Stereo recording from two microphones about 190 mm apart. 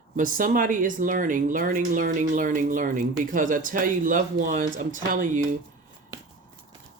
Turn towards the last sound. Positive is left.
turn(degrees=-45)  # may be behind; listen again after turning